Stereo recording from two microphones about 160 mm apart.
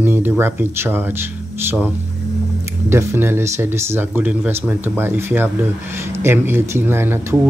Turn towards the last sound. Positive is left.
turn(degrees=-15)  # may be behind; listen again after turning